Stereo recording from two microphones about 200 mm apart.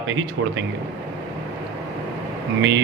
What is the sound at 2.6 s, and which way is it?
Speech, 60° right (ahead or behind).